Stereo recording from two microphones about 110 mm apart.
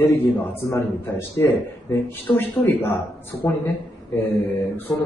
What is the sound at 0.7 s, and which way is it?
Speech, 25° left (ahead or behind).